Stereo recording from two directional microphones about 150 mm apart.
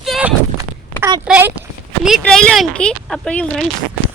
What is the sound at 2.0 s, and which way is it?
Speech, centre (ahead or behind).